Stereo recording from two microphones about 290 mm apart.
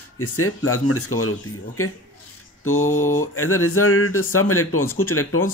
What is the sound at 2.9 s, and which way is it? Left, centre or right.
Mantra, left.